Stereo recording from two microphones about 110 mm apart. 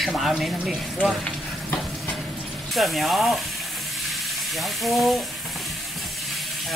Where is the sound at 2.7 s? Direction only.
Centre (ahead or behind).